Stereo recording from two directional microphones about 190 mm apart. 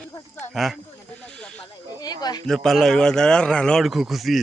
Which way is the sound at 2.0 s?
20° left (ahead or behind).